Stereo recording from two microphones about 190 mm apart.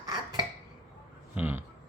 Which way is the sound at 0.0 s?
20° right (ahead or behind).